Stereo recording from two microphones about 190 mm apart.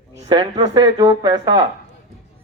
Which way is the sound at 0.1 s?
20° right (ahead or behind).